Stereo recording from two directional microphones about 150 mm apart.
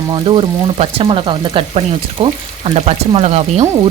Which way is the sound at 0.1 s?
30° right (ahead or behind).